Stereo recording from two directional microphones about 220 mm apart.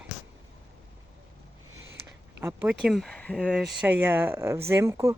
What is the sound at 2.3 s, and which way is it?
Speech, 10° right (ahead or behind).